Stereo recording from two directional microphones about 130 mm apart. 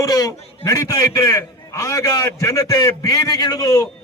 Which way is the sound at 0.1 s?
25° left (ahead or behind).